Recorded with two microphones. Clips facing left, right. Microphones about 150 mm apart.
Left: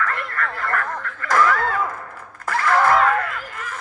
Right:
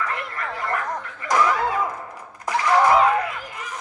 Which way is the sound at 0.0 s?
15° right (ahead or behind).